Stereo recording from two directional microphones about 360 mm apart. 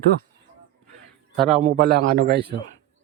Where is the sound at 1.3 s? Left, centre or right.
Centre.